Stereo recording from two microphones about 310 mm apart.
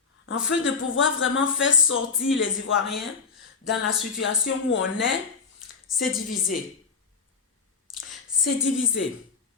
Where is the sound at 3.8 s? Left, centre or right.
Left.